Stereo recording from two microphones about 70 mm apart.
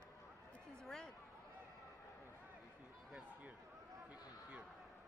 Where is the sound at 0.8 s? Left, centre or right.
Centre.